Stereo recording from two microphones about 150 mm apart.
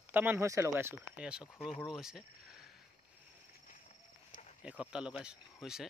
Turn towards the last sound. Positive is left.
turn(degrees=-5)  # may be behind; listen again after turning